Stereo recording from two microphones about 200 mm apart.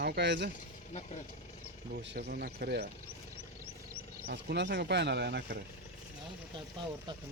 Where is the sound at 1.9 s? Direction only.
55° right (ahead or behind).